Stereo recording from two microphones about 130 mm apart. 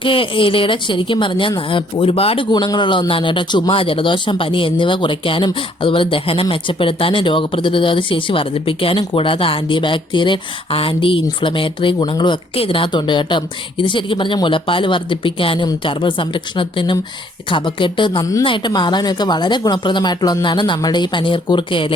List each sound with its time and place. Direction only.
0.0 s speech: 40° left (ahead or behind)